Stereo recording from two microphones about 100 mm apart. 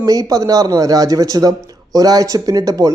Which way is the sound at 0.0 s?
40° right (ahead or behind).